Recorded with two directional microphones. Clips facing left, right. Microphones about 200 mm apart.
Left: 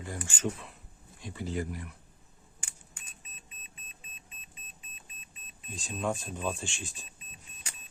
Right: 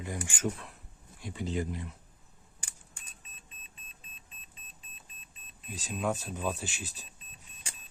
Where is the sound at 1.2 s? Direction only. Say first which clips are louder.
Right 1 dB; 15° right (ahead or behind).